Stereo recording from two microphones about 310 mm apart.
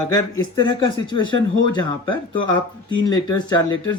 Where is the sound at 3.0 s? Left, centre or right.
Centre.